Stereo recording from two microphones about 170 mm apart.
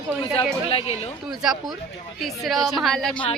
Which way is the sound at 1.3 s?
Centre (ahead or behind).